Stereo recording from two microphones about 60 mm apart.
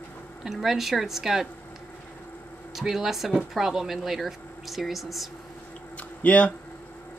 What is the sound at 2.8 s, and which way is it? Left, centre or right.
Speech, centre.